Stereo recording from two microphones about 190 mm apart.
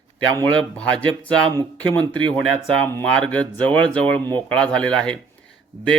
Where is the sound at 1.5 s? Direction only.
10° left (ahead or behind).